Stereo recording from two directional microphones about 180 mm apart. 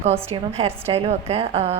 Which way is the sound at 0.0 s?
35° right (ahead or behind).